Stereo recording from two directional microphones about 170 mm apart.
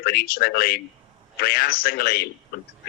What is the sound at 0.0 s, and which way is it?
Speech, 60° left (ahead or behind).